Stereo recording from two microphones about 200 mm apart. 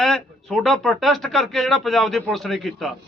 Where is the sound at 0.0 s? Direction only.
Centre (ahead or behind).